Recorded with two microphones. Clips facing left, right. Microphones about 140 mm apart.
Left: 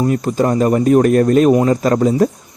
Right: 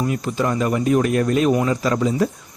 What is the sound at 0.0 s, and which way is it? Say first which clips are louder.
Speech: left 6 dB; 40° left (ahead or behind).